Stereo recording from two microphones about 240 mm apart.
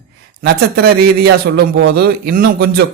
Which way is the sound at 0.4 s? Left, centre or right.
Right.